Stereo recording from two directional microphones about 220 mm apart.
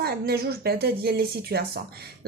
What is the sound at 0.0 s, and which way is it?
Speech, 45° right (ahead or behind).